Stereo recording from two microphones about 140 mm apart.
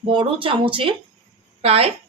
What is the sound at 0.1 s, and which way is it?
A woman's voice, 35° right (ahead or behind).